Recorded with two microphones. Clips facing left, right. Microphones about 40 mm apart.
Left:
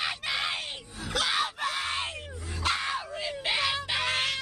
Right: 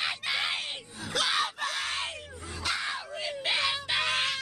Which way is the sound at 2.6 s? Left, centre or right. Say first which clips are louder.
Left 3 dB; left.